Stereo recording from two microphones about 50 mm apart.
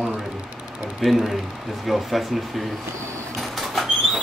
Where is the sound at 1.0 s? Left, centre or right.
Centre.